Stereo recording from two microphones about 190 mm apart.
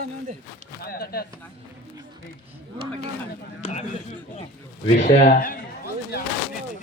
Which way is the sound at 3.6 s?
35° left (ahead or behind).